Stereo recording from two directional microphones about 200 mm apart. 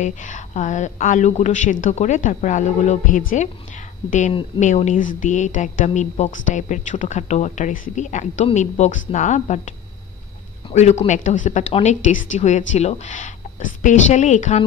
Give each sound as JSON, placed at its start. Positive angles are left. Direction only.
{"t": 0.0, "sound": "a woman's voice", "side_deg": 40}
{"t": 10.7, "sound": "a woman's voice", "side_deg": 35}